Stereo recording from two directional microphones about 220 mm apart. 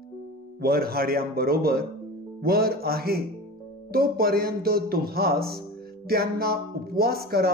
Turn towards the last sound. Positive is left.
turn(degrees=-45)  # may be behind; listen again after turning